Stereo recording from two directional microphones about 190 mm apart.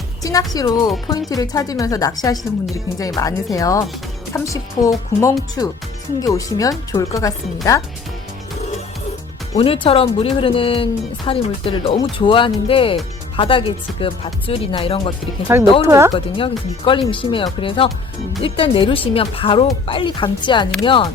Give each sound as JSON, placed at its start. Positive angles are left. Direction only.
{"t": 0.2, "sound": "music", "side_deg": 20}
{"t": 0.5, "sound": "speech", "side_deg": 20}
{"t": 9.6, "sound": "speech", "side_deg": 30}
{"t": 15.8, "sound": "speech", "side_deg": -15}
{"t": 16.1, "sound": "speech", "side_deg": 25}